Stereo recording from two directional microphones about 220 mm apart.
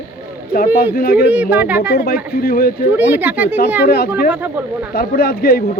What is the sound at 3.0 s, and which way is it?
Speech, 10° right (ahead or behind).